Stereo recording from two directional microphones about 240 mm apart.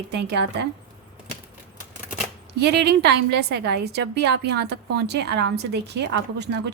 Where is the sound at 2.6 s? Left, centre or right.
Right.